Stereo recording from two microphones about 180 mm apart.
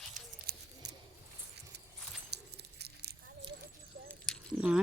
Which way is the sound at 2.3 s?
65° right (ahead or behind).